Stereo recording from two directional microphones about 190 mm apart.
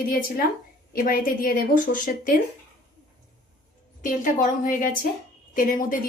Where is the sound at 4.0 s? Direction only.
45° left (ahead or behind).